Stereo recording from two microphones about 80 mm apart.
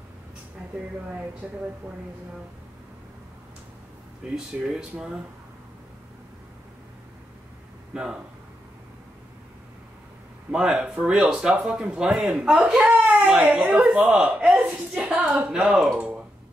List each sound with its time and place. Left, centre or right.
1.4 s speech: centre
4.5 s speech: centre
7.9 s speech: centre
10.5 s speech: centre
15.3 s speech: centre